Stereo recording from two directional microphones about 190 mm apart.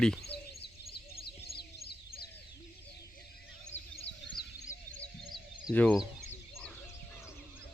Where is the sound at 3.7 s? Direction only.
35° left (ahead or behind).